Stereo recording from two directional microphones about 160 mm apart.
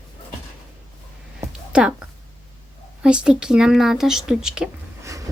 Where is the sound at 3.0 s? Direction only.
5° right (ahead or behind).